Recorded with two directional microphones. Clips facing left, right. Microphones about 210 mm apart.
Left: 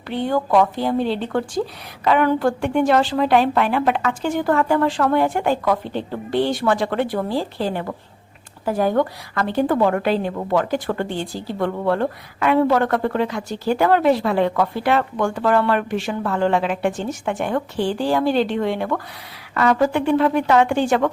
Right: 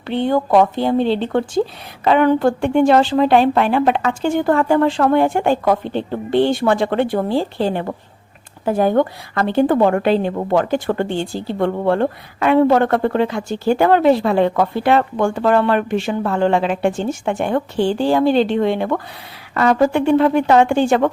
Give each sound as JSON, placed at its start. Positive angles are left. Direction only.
{"t": 0.1, "sound": "speech", "side_deg": -25}